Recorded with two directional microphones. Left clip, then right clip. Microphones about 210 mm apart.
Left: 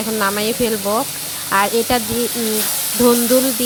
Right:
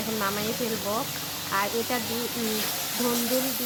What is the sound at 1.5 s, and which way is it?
Speech, 40° left (ahead or behind).